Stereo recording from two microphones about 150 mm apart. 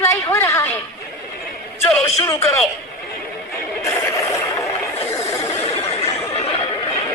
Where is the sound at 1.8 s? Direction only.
15° left (ahead or behind).